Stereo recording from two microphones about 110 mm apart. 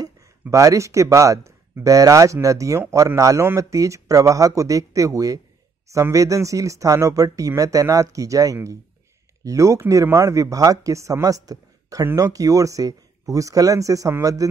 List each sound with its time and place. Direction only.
0.0 s speech: 30° right (ahead or behind)